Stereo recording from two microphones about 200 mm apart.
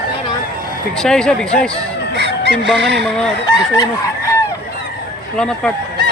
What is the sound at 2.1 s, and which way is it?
Chicken, 60° right (ahead or behind).